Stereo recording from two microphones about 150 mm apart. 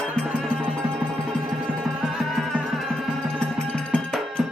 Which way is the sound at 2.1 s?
Centre (ahead or behind).